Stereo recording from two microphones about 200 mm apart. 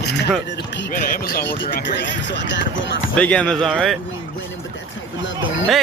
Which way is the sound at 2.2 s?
65° left (ahead or behind).